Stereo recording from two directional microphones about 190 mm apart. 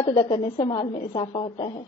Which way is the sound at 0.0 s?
20° left (ahead or behind).